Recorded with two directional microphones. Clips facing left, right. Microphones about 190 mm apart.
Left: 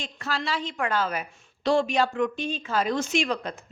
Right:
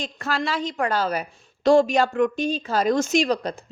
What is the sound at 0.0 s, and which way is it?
A woman's voice, 50° right (ahead or behind).